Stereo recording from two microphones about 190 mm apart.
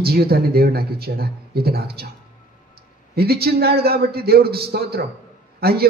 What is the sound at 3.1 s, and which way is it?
A man's voice, 55° right (ahead or behind).